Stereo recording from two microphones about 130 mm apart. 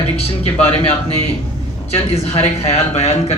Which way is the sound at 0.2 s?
50° left (ahead or behind).